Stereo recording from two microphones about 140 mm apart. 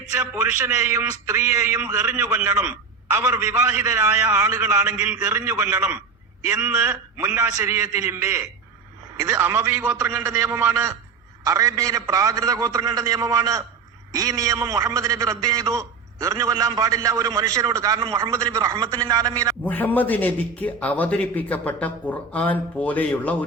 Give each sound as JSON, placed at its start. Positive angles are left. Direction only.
{"t": 0.2, "sound": "a man's voice", "side_deg": -15}
{"t": 19.6, "sound": "a man's voice", "side_deg": 10}